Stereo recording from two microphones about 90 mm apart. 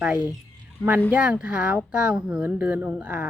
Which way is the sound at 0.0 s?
10° right (ahead or behind).